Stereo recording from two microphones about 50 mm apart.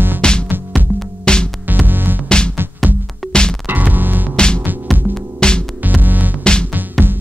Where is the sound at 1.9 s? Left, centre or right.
Right.